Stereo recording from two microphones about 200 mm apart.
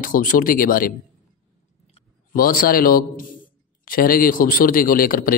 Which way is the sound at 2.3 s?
45° left (ahead or behind).